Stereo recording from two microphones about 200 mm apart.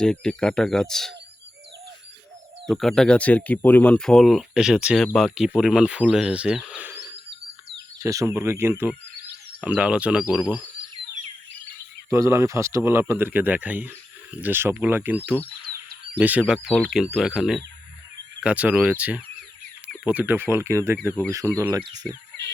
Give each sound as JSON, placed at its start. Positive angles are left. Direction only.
{"t": 0.0, "sound": "speech", "side_deg": 5}
{"t": 2.6, "sound": "speech", "side_deg": 0}
{"t": 12.1, "sound": "speech", "side_deg": -15}